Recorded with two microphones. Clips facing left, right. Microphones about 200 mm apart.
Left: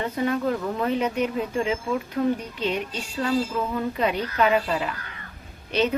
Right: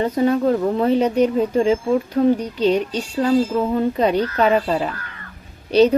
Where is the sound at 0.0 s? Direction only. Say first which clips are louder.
Right 7 dB; 35° right (ahead or behind).